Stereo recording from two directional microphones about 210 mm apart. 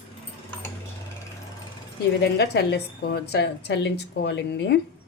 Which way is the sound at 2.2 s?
50° left (ahead or behind).